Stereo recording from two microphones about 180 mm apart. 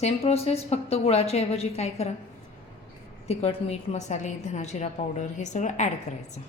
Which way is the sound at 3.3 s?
35° left (ahead or behind).